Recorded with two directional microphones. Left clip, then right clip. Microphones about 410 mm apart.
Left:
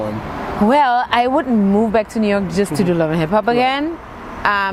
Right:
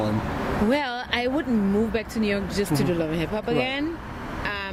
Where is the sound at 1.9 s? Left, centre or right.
Left.